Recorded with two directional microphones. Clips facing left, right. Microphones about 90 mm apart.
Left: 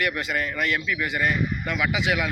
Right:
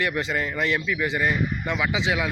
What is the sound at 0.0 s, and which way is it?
Speech, 25° right (ahead or behind).